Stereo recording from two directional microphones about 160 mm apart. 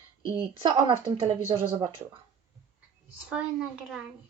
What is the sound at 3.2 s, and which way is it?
Speech, 5° right (ahead or behind).